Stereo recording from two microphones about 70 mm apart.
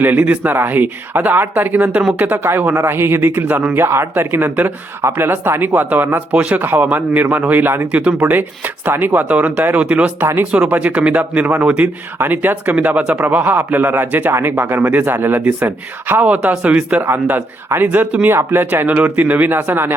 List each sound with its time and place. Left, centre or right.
0.0 s a man's voice: right
17.1 s a man's voice: right